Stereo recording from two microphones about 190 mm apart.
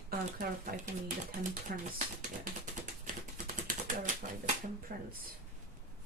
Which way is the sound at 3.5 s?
45° right (ahead or behind).